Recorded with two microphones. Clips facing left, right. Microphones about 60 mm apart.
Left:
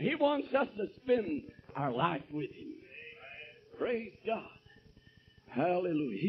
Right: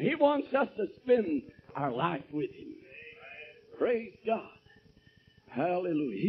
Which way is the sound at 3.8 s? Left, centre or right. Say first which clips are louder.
Right 5 dB; right.